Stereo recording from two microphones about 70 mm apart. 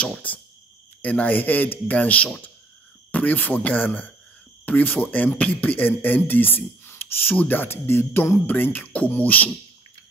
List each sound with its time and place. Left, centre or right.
0.0 s speech: left